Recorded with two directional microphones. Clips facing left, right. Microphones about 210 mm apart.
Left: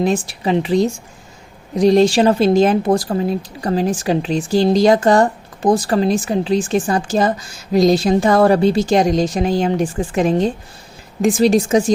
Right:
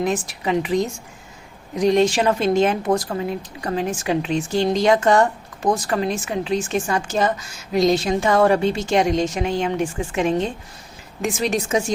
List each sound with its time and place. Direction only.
0.0 s a woman's voice: 30° left (ahead or behind)